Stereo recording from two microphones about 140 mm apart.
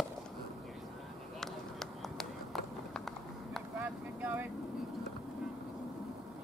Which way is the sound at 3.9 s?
10° right (ahead or behind).